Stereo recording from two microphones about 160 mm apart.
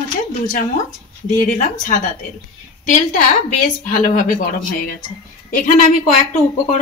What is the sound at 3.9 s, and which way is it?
Speech, 55° left (ahead or behind).